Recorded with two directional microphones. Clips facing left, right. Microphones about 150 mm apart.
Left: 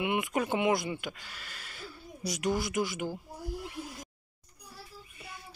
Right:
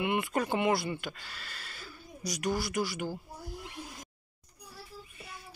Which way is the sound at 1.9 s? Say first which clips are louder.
Left 2 dB; 25° left (ahead or behind).